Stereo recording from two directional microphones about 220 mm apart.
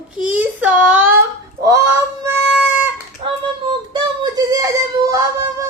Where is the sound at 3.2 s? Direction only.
20° right (ahead or behind).